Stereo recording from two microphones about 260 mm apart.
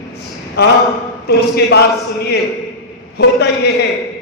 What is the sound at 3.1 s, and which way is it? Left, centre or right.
Speech, left.